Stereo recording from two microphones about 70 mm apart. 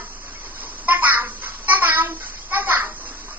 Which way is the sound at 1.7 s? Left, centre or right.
Right.